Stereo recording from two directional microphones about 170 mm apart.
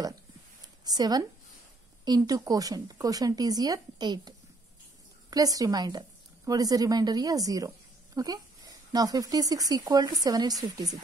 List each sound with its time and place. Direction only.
0.8 s speech: 25° right (ahead or behind)
5.3 s a woman's voice: 20° right (ahead or behind)